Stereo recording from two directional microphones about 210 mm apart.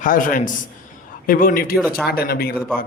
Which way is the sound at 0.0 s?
40° left (ahead or behind).